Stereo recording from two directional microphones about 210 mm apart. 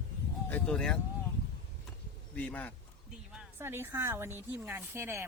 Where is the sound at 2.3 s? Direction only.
5° left (ahead or behind).